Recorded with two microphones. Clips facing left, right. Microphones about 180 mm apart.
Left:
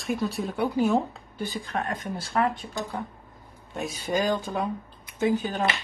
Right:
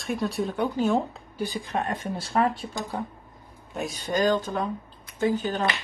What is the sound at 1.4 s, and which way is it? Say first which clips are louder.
Speech: right 2 dB; 15° right (ahead or behind).